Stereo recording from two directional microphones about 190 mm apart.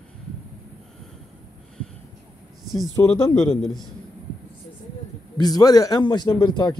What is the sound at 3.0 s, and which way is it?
Speech, 15° left (ahead or behind).